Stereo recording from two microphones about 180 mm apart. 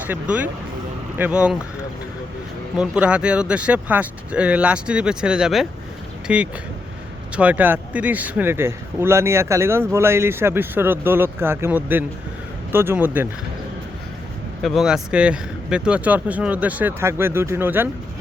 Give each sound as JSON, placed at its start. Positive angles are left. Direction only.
{"t": 0.1, "sound": "a man's voice", "side_deg": -10}
{"t": 2.7, "sound": "a man's voice", "side_deg": -5}
{"t": 14.6, "sound": "a man's voice", "side_deg": 0}